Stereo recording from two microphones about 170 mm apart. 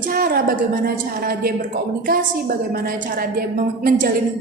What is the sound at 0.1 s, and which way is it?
A woman's voice, 60° right (ahead or behind).